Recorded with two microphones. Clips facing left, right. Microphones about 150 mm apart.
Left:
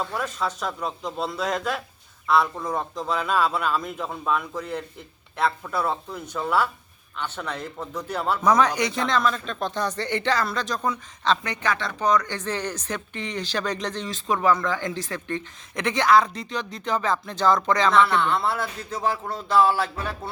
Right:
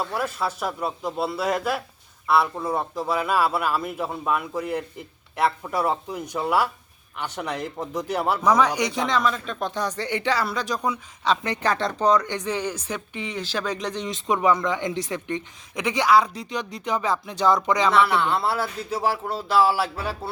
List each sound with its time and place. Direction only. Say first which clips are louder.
0.0 s speech: right 1 dB; 5° right (ahead or behind)
11.4 s speech: right 3 dB; 30° right (ahead or behind)
12.4 s speech: right 2 dB; 10° right (ahead or behind)